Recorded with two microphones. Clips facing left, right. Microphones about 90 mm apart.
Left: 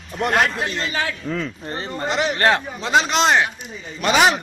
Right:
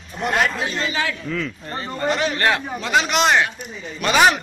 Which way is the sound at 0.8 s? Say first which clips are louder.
Right 1 dB; 35° left (ahead or behind).